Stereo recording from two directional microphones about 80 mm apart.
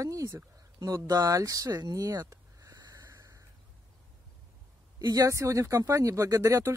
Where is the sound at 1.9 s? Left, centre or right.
Right.